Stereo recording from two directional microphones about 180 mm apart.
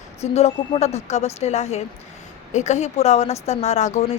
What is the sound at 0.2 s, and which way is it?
Speech, 35° left (ahead or behind).